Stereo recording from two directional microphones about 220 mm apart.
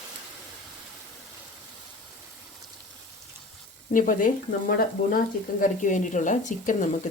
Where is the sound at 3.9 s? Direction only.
40° left (ahead or behind).